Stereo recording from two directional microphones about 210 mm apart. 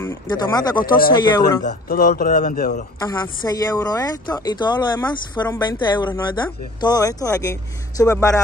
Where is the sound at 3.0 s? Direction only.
20° left (ahead or behind).